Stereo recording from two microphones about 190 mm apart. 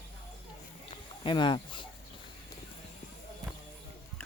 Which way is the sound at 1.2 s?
25° left (ahead or behind).